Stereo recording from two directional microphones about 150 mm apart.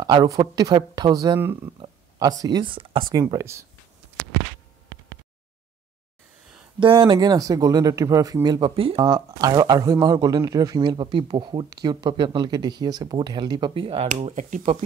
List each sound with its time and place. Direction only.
0.0 s speech: 25° right (ahead or behind)
6.8 s speech: 35° right (ahead or behind)
14.3 s speech: 50° right (ahead or behind)